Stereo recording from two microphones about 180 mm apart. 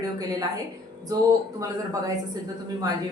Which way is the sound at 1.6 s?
20° right (ahead or behind).